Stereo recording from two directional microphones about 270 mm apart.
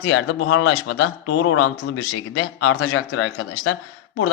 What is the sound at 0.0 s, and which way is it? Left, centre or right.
Speech, left.